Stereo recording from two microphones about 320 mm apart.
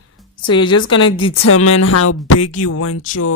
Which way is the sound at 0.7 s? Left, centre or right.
Left.